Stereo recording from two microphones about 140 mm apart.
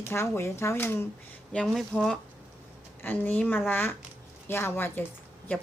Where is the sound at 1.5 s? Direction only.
Centre (ahead or behind).